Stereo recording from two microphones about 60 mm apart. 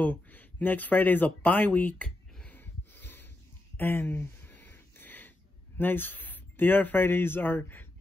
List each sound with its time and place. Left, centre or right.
0.0 s speech: left
2.5 s a sound: left
5.8 s speech: left